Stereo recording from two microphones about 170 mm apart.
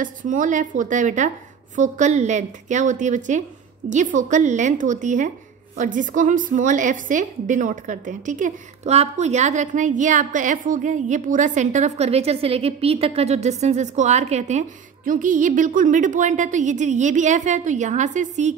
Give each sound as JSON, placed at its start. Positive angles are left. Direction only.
{"t": 0.0, "sound": "a woman's voice", "side_deg": -50}